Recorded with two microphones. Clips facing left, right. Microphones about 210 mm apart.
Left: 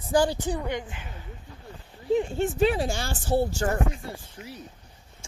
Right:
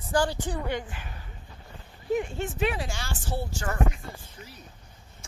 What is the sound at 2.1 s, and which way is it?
Speech, 30° left (ahead or behind).